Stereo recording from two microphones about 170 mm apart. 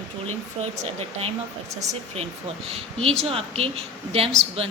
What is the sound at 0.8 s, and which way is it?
Speech, 35° right (ahead or behind).